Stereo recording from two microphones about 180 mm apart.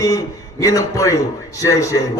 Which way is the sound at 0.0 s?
20° left (ahead or behind).